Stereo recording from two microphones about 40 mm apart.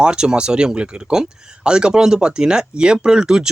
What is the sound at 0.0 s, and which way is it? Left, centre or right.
Speech, right.